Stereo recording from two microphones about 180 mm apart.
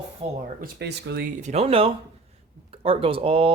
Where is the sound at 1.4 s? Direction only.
40° right (ahead or behind).